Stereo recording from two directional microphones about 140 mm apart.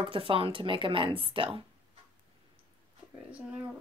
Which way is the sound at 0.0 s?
40° right (ahead or behind).